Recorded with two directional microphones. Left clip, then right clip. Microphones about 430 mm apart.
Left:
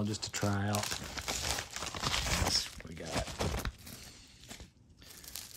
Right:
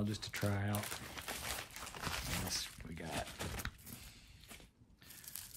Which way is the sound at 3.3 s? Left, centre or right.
Centre.